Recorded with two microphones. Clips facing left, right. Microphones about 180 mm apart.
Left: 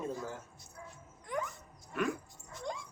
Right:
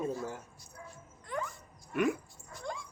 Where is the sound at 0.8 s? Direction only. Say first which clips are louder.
Even; 15° left (ahead or behind).